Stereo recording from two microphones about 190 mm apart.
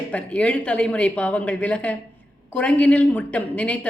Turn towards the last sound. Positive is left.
turn(degrees=5)  # may be behind; listen again after turning